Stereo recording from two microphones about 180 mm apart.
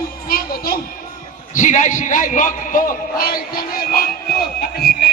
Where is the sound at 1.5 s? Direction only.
45° left (ahead or behind).